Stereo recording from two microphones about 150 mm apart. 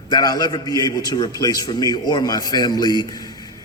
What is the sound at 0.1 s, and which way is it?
A man's voice, 25° left (ahead or behind).